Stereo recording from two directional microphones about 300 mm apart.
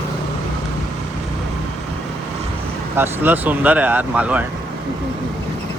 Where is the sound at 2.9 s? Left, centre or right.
Centre.